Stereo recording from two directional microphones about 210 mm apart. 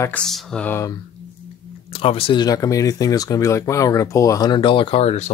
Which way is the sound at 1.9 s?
25° left (ahead or behind).